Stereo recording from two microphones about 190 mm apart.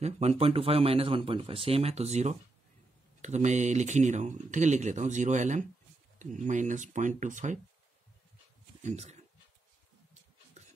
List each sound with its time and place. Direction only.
0.0 s speech: 35° right (ahead or behind)
8.8 s speech: 35° right (ahead or behind)
10.6 s a sound: 35° right (ahead or behind)